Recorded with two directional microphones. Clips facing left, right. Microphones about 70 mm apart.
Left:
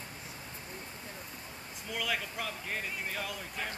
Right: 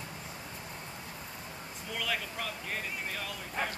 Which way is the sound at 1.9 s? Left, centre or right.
Centre.